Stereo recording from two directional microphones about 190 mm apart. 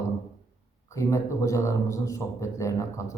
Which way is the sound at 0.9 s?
15° left (ahead or behind).